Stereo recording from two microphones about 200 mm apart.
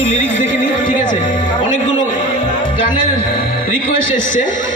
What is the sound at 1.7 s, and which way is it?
Music, 40° left (ahead or behind).